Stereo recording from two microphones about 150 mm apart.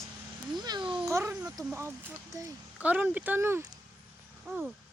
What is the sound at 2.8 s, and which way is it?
Speech, 10° right (ahead or behind).